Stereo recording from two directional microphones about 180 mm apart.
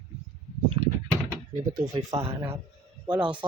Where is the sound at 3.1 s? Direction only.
5° right (ahead or behind).